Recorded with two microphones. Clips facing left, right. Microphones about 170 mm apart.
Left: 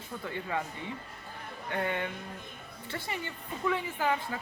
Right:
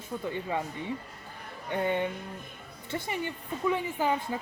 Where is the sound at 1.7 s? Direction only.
20° right (ahead or behind).